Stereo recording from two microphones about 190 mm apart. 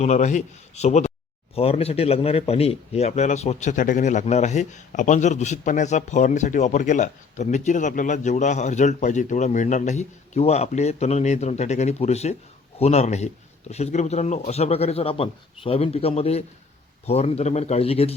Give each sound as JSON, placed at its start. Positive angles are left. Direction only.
{"t": 0.0, "sound": "speech", "side_deg": 40}